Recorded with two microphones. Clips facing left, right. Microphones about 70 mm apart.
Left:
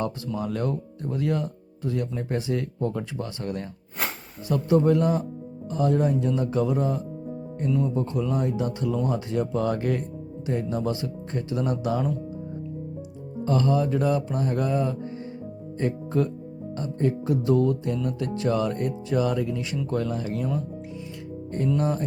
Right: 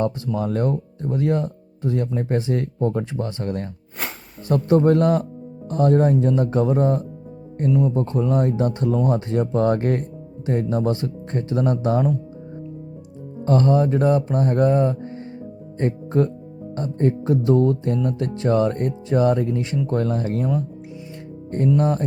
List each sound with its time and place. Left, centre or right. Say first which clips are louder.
0.3 s music: right 5 dB; right
4.4 s speech: right 4 dB; right
9.0 s music: right 5 dB; right
13.4 s music: right 5 dB; right
15.8 s speech: right 4 dB; right
16.7 s music: right 4 dB; right
19.9 s speech: right 4 dB; right
21.8 s music: right 5 dB; right